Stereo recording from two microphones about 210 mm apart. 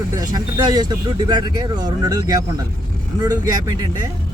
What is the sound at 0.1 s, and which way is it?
Speech, 15° right (ahead or behind).